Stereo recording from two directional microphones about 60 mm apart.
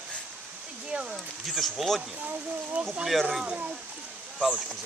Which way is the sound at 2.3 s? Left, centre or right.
Right.